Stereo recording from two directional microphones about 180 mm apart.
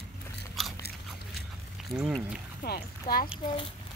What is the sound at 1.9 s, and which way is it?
Speech, 5° right (ahead or behind).